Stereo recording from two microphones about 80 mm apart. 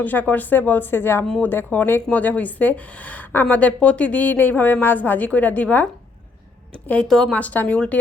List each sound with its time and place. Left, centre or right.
0.0 s a woman's voice: left
7.1 s a woman's voice: centre
7.3 s a woman's voice: centre